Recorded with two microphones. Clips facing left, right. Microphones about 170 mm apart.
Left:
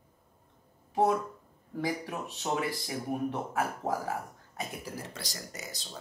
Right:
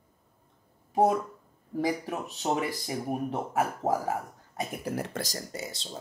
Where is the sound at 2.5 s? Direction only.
45° right (ahead or behind).